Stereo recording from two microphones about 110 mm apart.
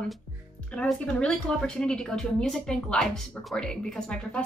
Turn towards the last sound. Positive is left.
turn(degrees=5)  # may be behind; listen again after turning